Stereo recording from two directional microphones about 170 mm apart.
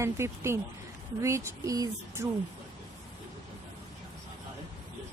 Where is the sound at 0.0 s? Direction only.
15° right (ahead or behind).